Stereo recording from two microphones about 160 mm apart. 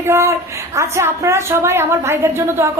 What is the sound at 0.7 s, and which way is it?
A woman's voice, 20° right (ahead or behind).